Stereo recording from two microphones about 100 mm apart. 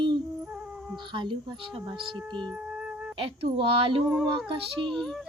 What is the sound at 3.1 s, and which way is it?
Speech, 65° right (ahead or behind).